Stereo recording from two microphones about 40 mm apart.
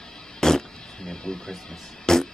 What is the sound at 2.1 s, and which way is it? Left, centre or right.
Music, centre.